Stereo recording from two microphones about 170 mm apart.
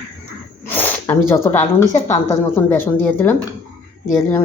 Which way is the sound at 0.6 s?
10° left (ahead or behind).